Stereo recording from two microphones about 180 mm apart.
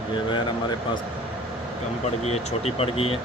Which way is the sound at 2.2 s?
35° left (ahead or behind).